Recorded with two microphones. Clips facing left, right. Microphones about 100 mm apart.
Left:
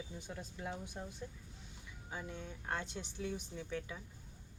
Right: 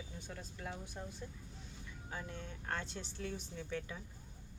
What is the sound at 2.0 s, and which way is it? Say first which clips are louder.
Speech: left 1 dB; 10° left (ahead or behind).